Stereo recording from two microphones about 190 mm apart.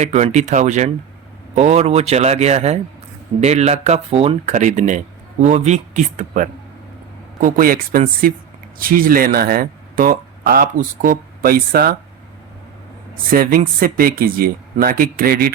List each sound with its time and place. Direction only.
0.0 s speech: 35° right (ahead or behind)
13.3 s speech: 50° right (ahead or behind)